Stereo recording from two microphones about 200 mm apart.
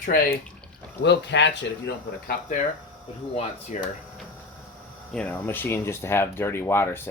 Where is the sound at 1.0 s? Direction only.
60° left (ahead or behind).